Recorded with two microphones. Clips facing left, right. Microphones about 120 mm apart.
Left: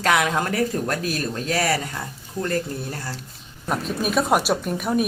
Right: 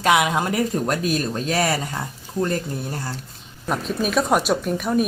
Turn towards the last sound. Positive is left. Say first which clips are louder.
# right 2 dB
turn(degrees=5)  # may be behind; listen again after turning